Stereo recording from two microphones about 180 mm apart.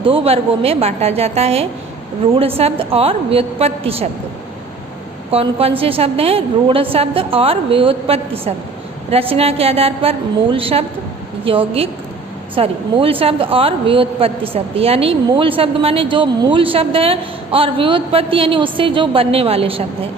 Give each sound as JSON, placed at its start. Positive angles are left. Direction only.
{"t": 0.0, "sound": "a woman's voice", "side_deg": -30}
{"t": 5.3, "sound": "a woman's voice", "side_deg": -35}